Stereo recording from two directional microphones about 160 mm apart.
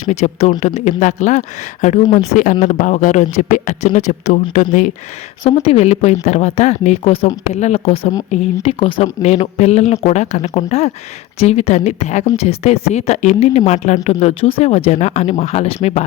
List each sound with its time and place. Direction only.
0.0 s speech: 45° left (ahead or behind)
5.4 s speech: 40° left (ahead or behind)